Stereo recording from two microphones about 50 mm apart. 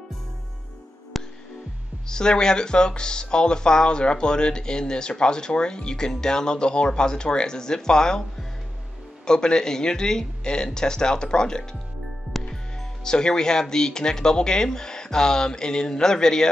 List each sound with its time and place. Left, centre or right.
1.1 s music: centre
2.0 s speech: centre
13.0 s speech: centre